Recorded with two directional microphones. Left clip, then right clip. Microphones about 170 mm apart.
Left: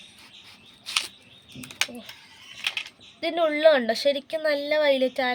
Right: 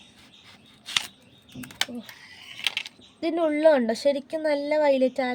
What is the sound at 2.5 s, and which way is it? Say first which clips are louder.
Speech: right 1 dB; 30° right (ahead or behind).